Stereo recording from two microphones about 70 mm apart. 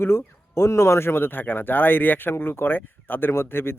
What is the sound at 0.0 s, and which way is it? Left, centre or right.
Speech, left.